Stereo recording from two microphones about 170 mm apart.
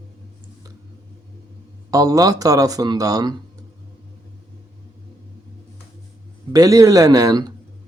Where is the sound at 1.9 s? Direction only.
20° right (ahead or behind).